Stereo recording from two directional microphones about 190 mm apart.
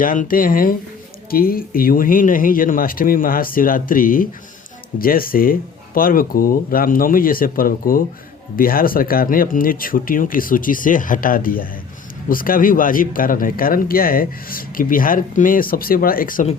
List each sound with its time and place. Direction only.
0.0 s speech: 45° left (ahead or behind)